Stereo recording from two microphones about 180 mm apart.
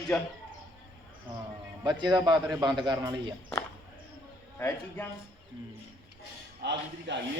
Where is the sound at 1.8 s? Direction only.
25° right (ahead or behind).